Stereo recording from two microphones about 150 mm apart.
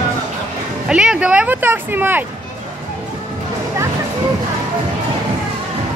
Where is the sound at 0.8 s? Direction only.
5° right (ahead or behind).